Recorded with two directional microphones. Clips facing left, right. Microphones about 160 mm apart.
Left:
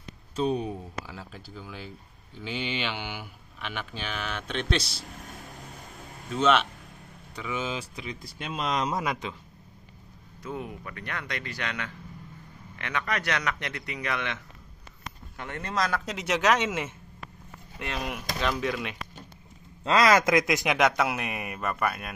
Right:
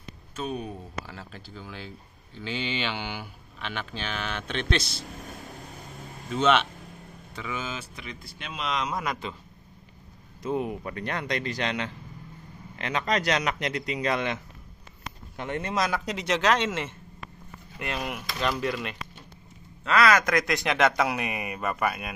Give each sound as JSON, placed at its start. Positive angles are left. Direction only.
{"t": 0.4, "sound": "speech", "side_deg": 30}
{"t": 0.7, "sound": "speech", "side_deg": 10}
{"t": 6.3, "sound": "speech", "side_deg": 5}
{"t": 8.5, "sound": "speech", "side_deg": 40}
{"t": 8.9, "sound": "speech", "side_deg": 10}
{"t": 10.4, "sound": "speech", "side_deg": -20}
{"t": 14.1, "sound": "speech", "side_deg": -35}
{"t": 15.3, "sound": "speech", "side_deg": -20}
{"t": 15.7, "sound": "speech", "side_deg": -10}
{"t": 16.1, "sound": "speech", "side_deg": 5}
{"t": 20.0, "sound": "speech", "side_deg": 20}
{"t": 20.7, "sound": "speech", "side_deg": 5}